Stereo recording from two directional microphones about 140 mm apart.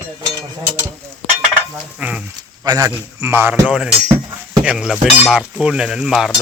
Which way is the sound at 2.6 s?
30° right (ahead or behind).